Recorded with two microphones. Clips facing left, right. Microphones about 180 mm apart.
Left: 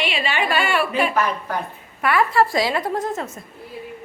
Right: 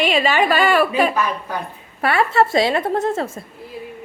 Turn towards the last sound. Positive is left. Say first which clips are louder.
# right 5 dB
turn(degrees=-30)  # may be behind; listen again after turning